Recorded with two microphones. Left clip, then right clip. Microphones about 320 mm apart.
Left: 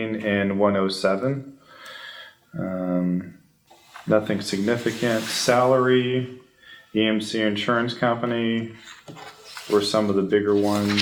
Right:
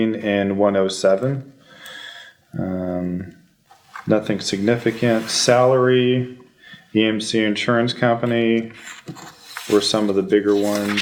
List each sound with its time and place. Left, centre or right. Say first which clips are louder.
0.0 s speech: right 4 dB; right
2.6 s speech: right 1 dB; right
4.1 s speech: right 2 dB; right
9.6 s speech: right 3 dB; right